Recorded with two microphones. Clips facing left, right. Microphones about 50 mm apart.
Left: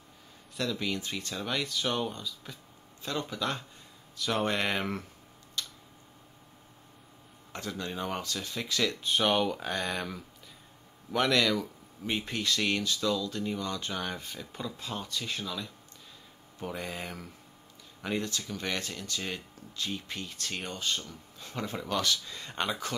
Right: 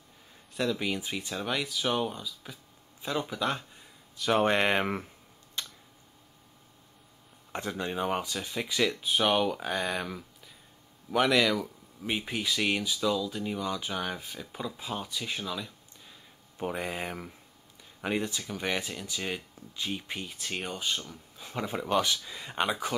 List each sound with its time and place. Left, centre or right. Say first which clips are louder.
0.6 s speech: right 2 dB; centre
4.5 s speech: right 4 dB; right
5.6 s a sound: even; right
7.5 s speech: right 4 dB; right
16.5 s speech: right 4 dB; right